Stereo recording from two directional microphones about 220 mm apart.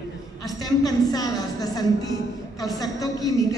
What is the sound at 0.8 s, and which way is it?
A woman's voice, 15° left (ahead or behind).